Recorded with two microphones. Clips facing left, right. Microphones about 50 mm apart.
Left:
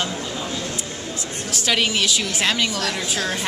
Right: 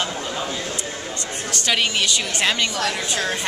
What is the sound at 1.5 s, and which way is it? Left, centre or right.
Speech, centre.